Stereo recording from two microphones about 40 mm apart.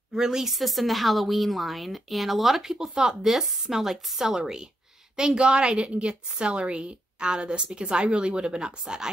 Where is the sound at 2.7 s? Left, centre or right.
Centre.